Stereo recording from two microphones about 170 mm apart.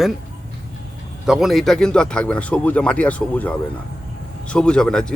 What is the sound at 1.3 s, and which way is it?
Speech, centre (ahead or behind).